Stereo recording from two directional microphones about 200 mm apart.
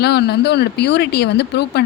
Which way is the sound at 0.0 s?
55° left (ahead or behind).